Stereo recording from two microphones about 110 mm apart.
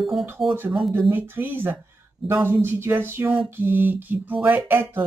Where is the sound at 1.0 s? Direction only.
20° right (ahead or behind).